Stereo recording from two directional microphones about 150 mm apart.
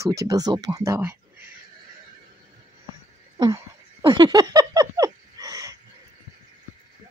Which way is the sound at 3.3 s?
30° right (ahead or behind).